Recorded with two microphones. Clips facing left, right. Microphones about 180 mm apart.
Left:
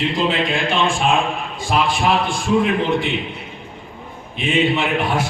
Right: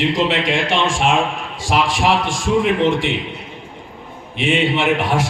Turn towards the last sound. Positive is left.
turn(degrees=-90)